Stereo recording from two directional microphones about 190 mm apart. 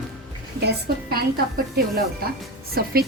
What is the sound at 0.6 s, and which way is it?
Speech, 60° right (ahead or behind).